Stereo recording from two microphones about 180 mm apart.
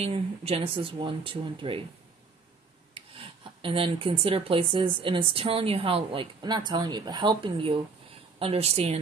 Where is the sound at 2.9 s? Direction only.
30° right (ahead or behind).